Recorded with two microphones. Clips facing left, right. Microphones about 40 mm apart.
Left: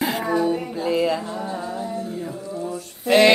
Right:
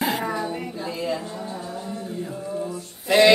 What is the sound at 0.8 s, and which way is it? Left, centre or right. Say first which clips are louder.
Music: left 7 dB; left.